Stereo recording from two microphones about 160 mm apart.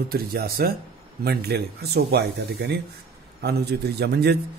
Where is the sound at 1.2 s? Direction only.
85° right.